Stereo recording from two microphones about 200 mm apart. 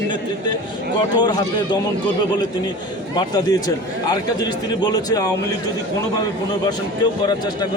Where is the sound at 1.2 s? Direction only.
20° left (ahead or behind).